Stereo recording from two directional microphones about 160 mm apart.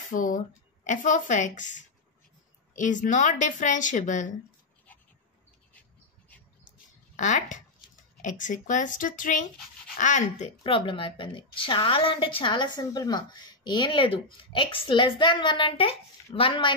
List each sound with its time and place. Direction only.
0.1 s a woman's voice: 55° left (ahead or behind)
5.8 s bird: 10° left (ahead or behind)
7.2 s a woman's voice: 50° left (ahead or behind)
10.6 s a woman's voice: 35° left (ahead or behind)